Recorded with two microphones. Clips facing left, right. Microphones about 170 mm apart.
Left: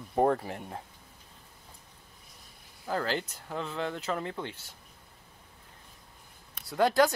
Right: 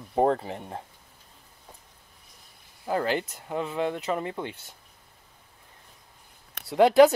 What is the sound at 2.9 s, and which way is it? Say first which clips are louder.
Speech: right 5 dB; 10° right (ahead or behind).